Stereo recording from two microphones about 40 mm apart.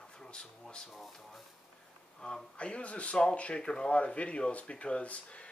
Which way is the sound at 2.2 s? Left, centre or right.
Left.